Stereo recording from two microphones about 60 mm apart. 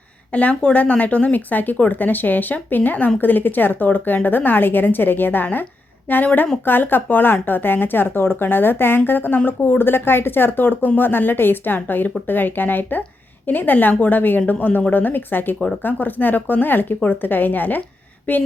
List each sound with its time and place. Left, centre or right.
0.3 s speech: left